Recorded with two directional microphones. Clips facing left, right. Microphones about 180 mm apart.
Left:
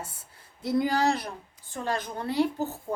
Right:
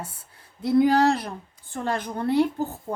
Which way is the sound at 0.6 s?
60° right (ahead or behind).